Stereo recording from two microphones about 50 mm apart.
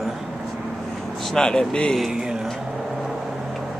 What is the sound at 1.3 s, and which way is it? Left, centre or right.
Speech, centre.